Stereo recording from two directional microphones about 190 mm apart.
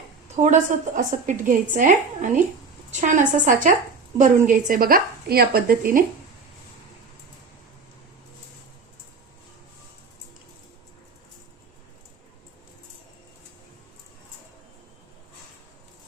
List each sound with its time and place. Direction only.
0.3 s a woman's voice: 40° right (ahead or behind)